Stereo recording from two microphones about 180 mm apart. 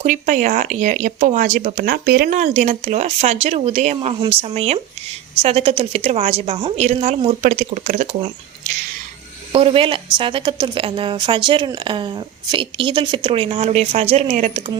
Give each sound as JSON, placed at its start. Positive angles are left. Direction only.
{"t": 0.0, "sound": "a woman's voice", "side_deg": -45}
{"t": 9.5, "sound": "a woman's voice", "side_deg": -30}